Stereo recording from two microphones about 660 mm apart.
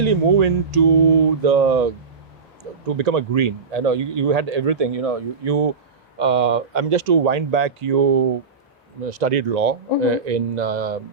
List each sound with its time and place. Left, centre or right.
0.0 s mantra: right
2.8 s speech: right
6.1 s speech: right
9.0 s speech: right